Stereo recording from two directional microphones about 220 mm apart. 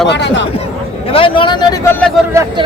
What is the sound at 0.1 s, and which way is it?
Speech, 55° left (ahead or behind).